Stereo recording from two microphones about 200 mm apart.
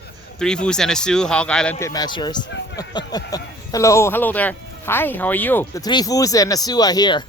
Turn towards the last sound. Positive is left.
turn(degrees=20)  # may be behind; listen again after turning